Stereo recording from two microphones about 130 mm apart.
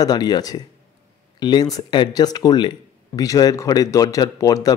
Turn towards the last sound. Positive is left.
turn(degrees=25)  # may be behind; listen again after turning